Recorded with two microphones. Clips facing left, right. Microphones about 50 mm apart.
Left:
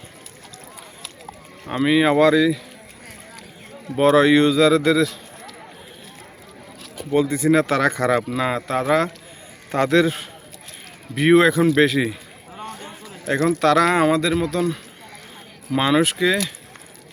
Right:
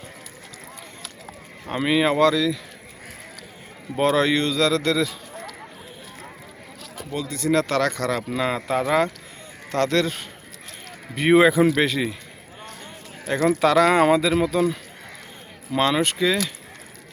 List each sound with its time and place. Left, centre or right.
1.6 s speech: centre
3.9 s speech: centre
7.1 s speech: left
7.3 s speech: centre
11.7 s speech: centre
12.8 s a sound: centre
13.4 s speech: centre
15.7 s speech: centre